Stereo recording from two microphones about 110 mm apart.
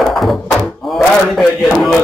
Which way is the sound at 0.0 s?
Centre (ahead or behind).